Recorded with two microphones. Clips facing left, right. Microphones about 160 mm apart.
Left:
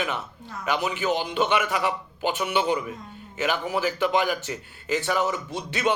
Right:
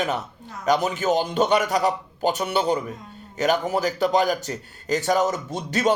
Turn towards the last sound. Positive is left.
turn(degrees=-40)  # may be behind; listen again after turning